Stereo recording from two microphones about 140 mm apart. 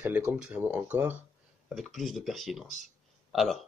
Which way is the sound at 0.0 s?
10° right (ahead or behind).